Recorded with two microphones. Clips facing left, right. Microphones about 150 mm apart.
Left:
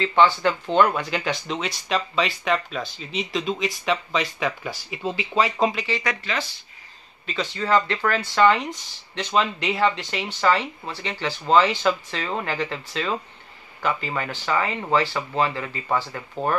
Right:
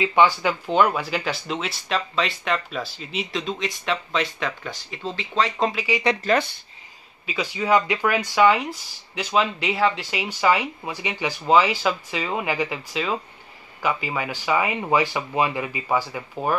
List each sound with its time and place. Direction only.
0.0 s speech: 10° right (ahead or behind)
6.2 s speech: 55° right (ahead or behind)
7.2 s speech: 10° right (ahead or behind)